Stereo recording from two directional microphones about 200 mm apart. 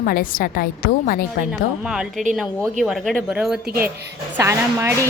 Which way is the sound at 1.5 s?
5° right (ahead or behind).